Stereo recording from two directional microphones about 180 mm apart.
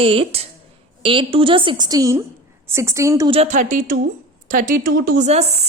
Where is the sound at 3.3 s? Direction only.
40° right (ahead or behind).